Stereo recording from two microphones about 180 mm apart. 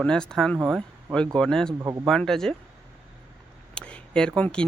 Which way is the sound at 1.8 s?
15° right (ahead or behind).